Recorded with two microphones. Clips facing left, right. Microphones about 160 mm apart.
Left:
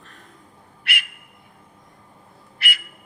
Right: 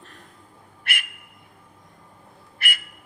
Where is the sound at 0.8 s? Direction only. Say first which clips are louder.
Left 1 dB; 50° right (ahead or behind).